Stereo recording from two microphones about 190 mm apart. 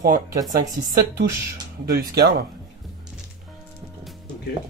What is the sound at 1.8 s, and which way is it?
Speech, 55° right (ahead or behind).